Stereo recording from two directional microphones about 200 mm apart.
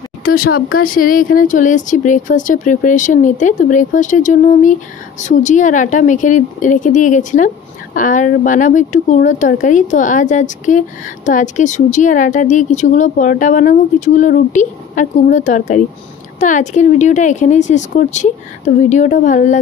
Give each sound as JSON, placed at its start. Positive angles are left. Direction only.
{"t": 0.2, "sound": "speech", "side_deg": 45}